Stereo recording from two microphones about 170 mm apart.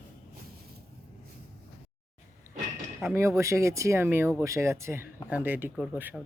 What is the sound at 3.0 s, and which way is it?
Speech, 15° right (ahead or behind).